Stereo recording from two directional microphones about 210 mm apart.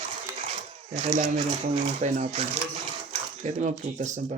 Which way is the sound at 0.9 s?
30° right (ahead or behind).